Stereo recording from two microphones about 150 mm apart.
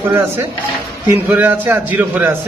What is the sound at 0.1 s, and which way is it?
A man's voice, 15° right (ahead or behind).